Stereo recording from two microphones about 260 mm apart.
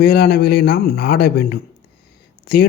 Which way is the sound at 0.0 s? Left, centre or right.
Left.